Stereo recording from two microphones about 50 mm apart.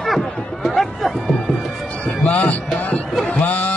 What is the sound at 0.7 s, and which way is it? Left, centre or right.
Music, centre.